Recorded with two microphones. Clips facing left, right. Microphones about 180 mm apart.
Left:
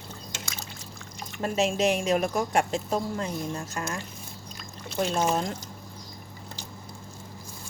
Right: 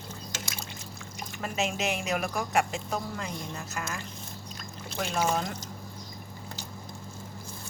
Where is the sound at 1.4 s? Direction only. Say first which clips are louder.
Left 6 dB; 30° left (ahead or behind).